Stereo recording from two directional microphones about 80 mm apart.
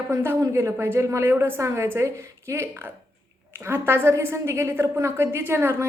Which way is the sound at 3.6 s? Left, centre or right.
Right.